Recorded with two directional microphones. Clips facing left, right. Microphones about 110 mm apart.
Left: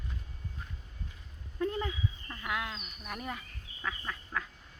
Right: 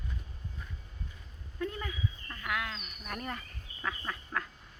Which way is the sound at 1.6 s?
25° left (ahead or behind).